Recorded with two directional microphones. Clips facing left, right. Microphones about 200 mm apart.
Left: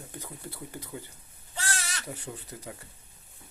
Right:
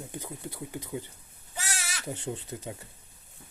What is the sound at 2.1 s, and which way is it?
Speech, 25° right (ahead or behind).